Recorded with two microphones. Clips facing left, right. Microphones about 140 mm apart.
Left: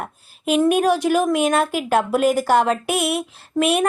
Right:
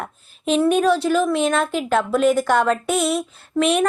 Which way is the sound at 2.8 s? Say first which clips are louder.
Right 1 dB; 65° left (ahead or behind).